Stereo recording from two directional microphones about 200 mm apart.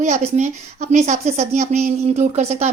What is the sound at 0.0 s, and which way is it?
Speech, 35° right (ahead or behind).